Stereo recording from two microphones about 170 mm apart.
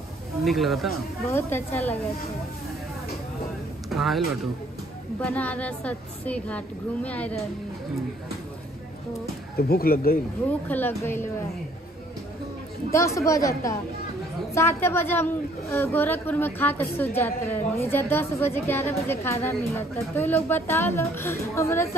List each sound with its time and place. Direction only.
0.4 s speech: centre (ahead or behind)
1.3 s a woman's voice: 15° left (ahead or behind)
3.9 s speech: centre (ahead or behind)
5.2 s a woman's voice: 10° left (ahead or behind)
9.6 s speech: 65° left (ahead or behind)
10.7 s a woman's voice: 15° left (ahead or behind)
12.9 s a woman's voice: 15° left (ahead or behind)